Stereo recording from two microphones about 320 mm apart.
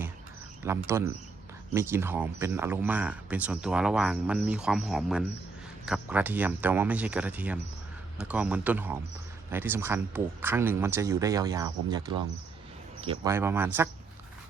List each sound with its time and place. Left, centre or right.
0.6 s speech: centre
13.3 s speech: centre